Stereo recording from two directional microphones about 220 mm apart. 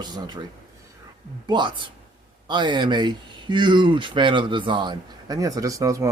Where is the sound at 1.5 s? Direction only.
20° right (ahead or behind).